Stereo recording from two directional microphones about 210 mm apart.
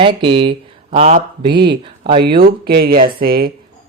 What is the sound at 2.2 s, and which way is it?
Speech, 45° right (ahead or behind).